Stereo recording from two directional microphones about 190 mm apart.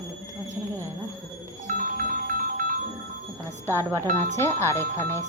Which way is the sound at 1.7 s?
45° right (ahead or behind).